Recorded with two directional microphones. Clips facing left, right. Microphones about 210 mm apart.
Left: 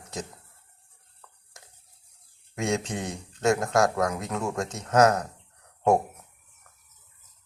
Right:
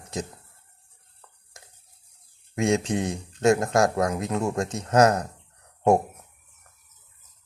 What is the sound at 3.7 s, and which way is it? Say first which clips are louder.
Speech: right 2 dB; 30° right (ahead or behind).